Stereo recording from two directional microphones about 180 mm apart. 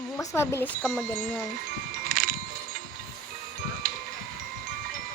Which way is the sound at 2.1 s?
55° right (ahead or behind).